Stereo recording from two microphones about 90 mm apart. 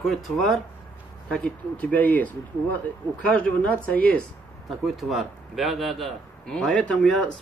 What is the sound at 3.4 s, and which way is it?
Speech, 15° left (ahead or behind).